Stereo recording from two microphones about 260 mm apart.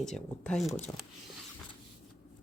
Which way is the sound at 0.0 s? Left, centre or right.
Centre.